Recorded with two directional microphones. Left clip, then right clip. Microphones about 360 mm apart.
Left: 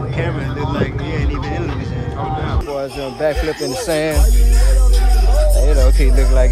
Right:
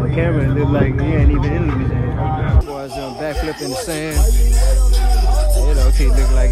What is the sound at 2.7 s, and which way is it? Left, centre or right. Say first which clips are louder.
Speech: left 3 dB; centre.